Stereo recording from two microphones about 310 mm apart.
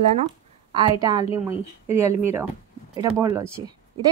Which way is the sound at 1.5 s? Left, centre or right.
Centre.